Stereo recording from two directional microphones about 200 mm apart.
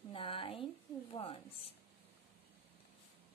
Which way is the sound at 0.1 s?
25° left (ahead or behind).